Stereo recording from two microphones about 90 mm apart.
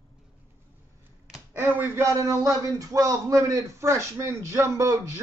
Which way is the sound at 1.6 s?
20° right (ahead or behind).